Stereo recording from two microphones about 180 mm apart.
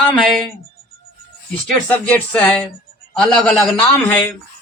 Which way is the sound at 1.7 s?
10° left (ahead or behind).